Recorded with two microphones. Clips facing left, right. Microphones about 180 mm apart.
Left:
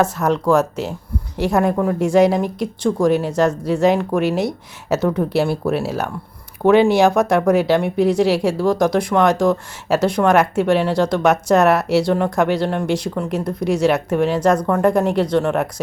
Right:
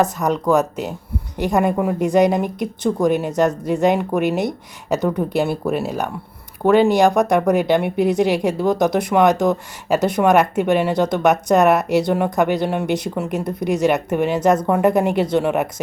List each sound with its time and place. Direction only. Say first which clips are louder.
0.0 s speech: left 1 dB; centre (ahead or behind)
8.5 s speech: left 1 dB; 20° right (ahead or behind)
8.8 s speech: right 1 dB; centre (ahead or behind)